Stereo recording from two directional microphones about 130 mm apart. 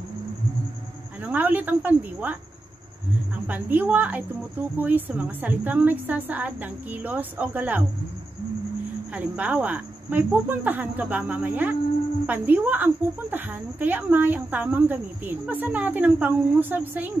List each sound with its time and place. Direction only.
1.2 s speech: 10° right (ahead or behind)
3.4 s speech: 10° right (ahead or behind)
9.1 s speech: 10° right (ahead or behind)